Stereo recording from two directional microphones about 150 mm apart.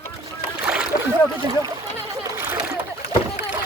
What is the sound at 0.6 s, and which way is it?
Splash, 5° right (ahead or behind).